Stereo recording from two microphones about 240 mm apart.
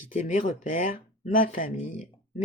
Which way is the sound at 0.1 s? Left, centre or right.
Left.